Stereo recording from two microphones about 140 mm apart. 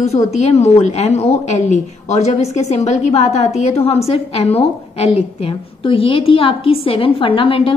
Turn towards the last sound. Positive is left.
turn(degrees=40)  # may be behind; listen again after turning